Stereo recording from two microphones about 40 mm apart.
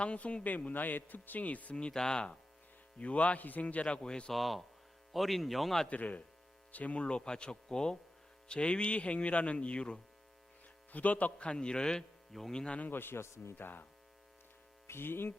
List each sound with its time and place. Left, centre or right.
0.0 s speech: left
0.4 s speech: left
1.7 s speech: centre
3.0 s speech: left
4.3 s speech: centre
5.9 s speech: left
7.0 s speech: left
10.9 s speech: left; by 12.7 s centre
12.9 s a man's voice: left
13.6 s speech: left
14.8 s speech: left